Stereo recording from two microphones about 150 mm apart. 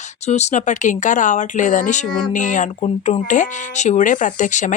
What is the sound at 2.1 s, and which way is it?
Speech, 5° left (ahead or behind).